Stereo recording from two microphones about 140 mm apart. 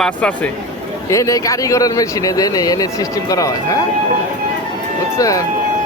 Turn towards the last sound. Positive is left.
turn(degrees=25)  # may be behind; listen again after turning